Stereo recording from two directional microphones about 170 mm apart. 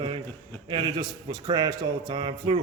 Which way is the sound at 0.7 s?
25° right (ahead or behind).